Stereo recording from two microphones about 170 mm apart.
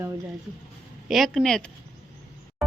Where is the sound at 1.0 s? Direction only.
Centre (ahead or behind).